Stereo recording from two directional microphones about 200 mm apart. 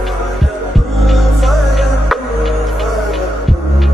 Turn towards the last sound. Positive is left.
turn(degrees=0)  # may be behind; listen again after turning